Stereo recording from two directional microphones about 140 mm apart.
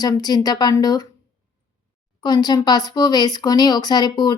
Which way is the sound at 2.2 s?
30° left (ahead or behind).